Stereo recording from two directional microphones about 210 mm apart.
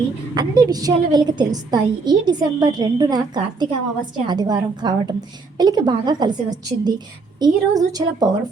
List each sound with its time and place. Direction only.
0.3 s a woman's voice: 20° right (ahead or behind)